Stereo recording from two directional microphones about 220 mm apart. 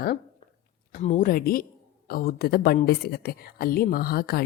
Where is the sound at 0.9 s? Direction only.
35° left (ahead or behind).